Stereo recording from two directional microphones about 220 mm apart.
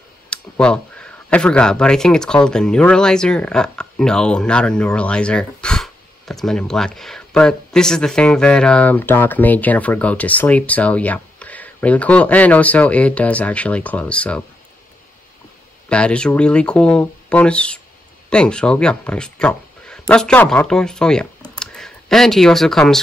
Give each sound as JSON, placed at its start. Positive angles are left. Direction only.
{"t": 0.3, "sound": "speech", "side_deg": 5}
{"t": 15.9, "sound": "speech", "side_deg": 5}